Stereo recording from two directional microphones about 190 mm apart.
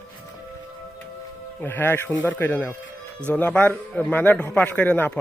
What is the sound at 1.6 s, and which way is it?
A man's voice, 10° left (ahead or behind).